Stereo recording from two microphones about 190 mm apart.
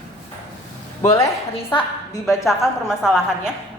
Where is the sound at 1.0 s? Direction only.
20° left (ahead or behind).